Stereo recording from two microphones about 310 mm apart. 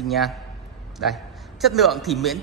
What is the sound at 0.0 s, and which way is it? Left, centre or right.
A man's voice, centre.